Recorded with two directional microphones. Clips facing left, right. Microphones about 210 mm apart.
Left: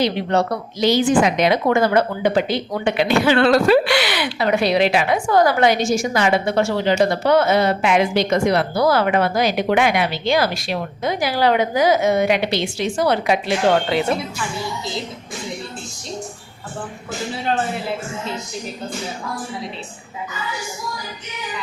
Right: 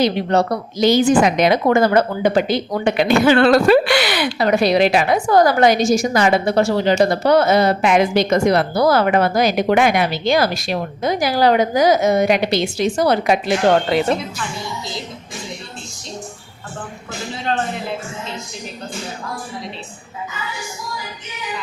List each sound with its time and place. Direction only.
0.0 s speech: 40° right (ahead or behind)